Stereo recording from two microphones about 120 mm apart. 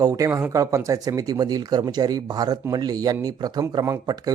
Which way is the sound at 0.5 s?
25° right (ahead or behind).